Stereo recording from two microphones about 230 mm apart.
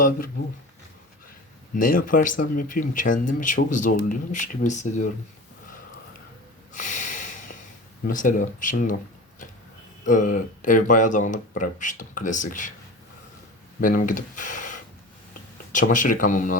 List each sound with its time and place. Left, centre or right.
1.7 s speech: left
6.7 s snort: left
8.0 s speech: left
10.1 s speech: left
13.8 s speech: left